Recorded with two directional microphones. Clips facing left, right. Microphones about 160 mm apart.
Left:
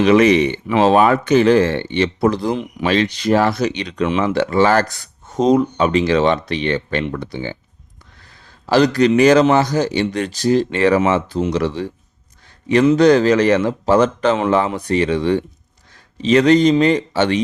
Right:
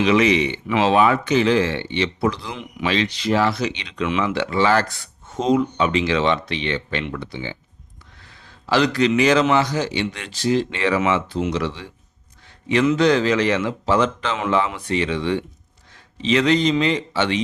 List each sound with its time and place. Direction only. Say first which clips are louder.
0.0 s speech: left 5 dB; 50° left (ahead or behind)
8.6 s speech: left 5 dB; 40° left (ahead or behind)